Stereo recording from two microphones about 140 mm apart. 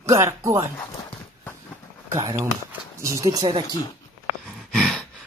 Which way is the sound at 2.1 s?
25° right (ahead or behind).